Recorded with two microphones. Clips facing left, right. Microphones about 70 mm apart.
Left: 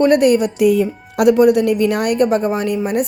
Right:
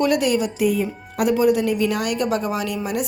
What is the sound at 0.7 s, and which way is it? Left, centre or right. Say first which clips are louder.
A woman's voice: left 7 dB; left.